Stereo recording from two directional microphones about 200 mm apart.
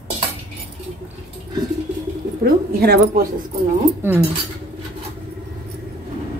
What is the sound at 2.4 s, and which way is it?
Speech, 50° right (ahead or behind).